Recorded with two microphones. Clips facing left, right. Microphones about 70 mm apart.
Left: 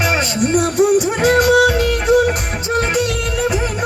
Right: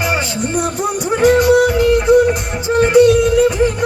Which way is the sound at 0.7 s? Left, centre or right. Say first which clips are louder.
Left 4 dB; left.